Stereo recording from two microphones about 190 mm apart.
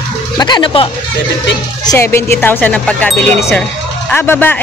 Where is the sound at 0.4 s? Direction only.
25° left (ahead or behind).